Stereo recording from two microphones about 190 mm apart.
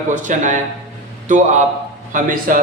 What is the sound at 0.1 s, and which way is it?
A man's voice, 45° right (ahead or behind).